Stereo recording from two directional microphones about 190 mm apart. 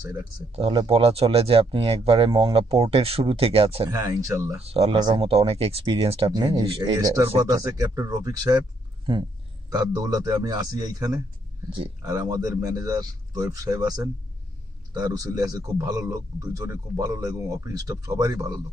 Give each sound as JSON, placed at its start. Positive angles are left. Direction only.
{"t": 0.6, "sound": "speech", "side_deg": -30}
{"t": 4.6, "sound": "speech", "side_deg": -30}